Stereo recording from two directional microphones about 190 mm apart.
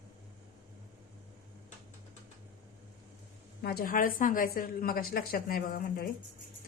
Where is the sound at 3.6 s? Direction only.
55° left (ahead or behind).